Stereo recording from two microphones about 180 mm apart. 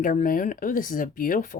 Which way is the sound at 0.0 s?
45° left (ahead or behind).